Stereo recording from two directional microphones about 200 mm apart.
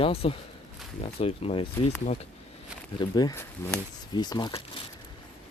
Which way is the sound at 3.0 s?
20° left (ahead or behind).